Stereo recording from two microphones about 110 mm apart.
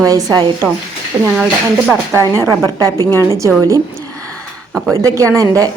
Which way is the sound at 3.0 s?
25° left (ahead or behind).